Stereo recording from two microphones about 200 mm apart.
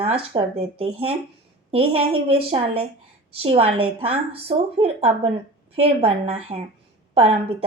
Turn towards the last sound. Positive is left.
turn(degrees=-30)  # may be behind; listen again after turning